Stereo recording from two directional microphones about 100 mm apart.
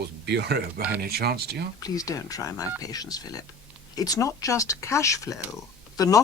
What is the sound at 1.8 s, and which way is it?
Speech, 35° left (ahead or behind).